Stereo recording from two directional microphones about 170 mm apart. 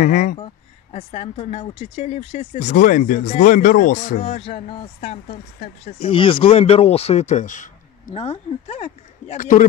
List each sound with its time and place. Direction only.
0.0 s speech: 50° left (ahead or behind)
0.9 s speech: 40° left (ahead or behind)
4.5 s speech: 30° left (ahead or behind)
8.1 s speech: 35° left (ahead or behind)